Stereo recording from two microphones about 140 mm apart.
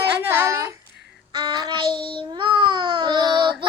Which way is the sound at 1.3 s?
30° right (ahead or behind).